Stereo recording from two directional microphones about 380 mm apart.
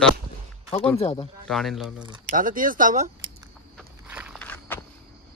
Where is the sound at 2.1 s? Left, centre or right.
Right.